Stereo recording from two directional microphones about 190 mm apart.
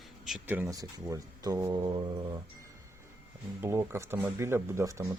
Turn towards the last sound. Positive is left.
turn(degrees=-15)  # may be behind; listen again after turning